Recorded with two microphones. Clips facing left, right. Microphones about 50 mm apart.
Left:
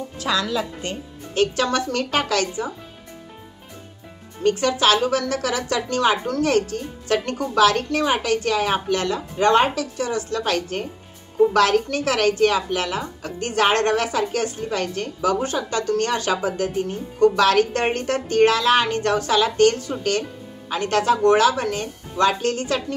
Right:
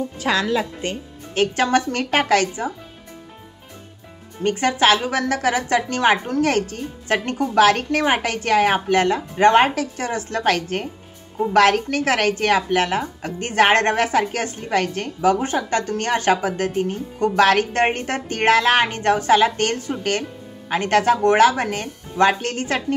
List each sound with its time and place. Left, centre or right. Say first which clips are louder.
0.2 s speech: right 2 dB; right
4.4 s speech: right 1 dB; right